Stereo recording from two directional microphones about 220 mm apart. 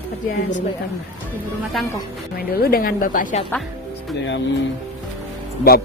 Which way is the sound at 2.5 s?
45° left (ahead or behind).